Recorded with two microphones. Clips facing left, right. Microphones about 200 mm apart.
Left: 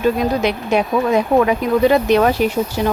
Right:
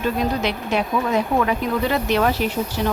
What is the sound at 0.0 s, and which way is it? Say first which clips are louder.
Speech: left 5 dB; 10° left (ahead or behind).